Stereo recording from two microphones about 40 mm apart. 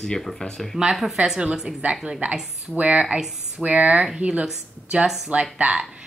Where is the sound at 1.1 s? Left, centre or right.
Centre; by 4.4 s right.